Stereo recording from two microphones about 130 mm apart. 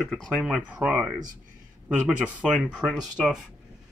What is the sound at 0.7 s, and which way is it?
Speech, 10° right (ahead or behind).